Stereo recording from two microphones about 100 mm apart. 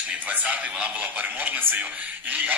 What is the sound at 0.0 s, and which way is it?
A man's voice, 15° right (ahead or behind).